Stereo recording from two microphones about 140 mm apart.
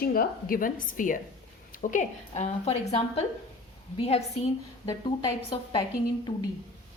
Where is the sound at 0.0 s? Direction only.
90° left; by 4.2 s 45° left (ahead or behind).